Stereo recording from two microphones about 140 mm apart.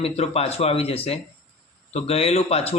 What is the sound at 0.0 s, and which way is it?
A man's voice, 45° left (ahead or behind).